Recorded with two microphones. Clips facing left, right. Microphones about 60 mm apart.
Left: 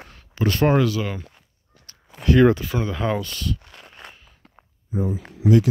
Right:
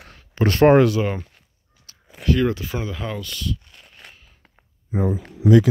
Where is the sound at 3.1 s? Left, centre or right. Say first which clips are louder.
Left 2 dB; left.